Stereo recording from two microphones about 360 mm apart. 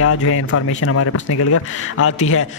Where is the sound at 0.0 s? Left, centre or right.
Left.